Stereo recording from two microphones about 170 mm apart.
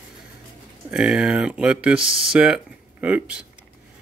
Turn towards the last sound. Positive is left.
turn(degrees=-10)  # may be behind; listen again after turning